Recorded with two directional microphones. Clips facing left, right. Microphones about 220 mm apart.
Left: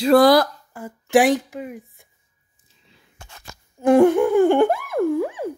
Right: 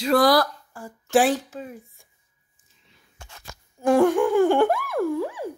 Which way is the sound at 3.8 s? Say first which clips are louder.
Left 4 dB; 20° left (ahead or behind).